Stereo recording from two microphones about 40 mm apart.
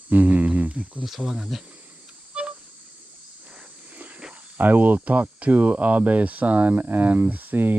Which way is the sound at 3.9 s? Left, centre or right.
Right.